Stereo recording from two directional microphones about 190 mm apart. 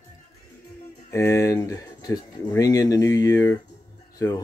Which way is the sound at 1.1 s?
15° left (ahead or behind).